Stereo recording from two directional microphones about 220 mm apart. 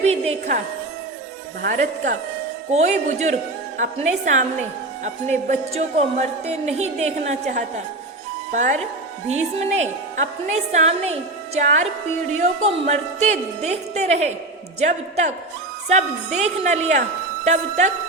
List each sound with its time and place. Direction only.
0.0 s music: 30° right (ahead or behind)
1.6 s a woman's voice: 35° right (ahead or behind)